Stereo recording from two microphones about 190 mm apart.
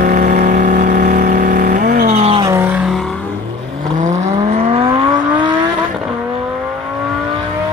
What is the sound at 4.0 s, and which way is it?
Vehicle, 40° right (ahead or behind).